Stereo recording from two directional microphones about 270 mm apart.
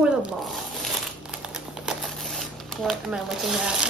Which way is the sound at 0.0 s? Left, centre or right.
Centre.